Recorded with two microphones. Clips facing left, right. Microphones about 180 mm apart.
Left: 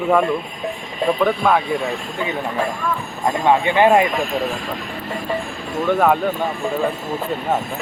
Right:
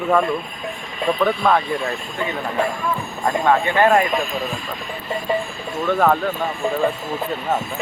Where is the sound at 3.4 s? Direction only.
15° left (ahead or behind).